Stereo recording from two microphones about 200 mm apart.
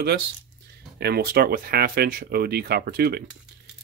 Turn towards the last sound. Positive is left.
turn(degrees=-50)  # may be behind; listen again after turning